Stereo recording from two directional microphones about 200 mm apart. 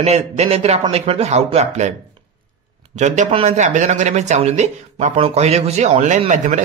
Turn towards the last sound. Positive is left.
turn(degrees=-35)  # may be behind; listen again after turning